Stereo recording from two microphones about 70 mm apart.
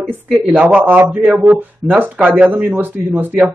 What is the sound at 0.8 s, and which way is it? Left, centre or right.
Speech, right.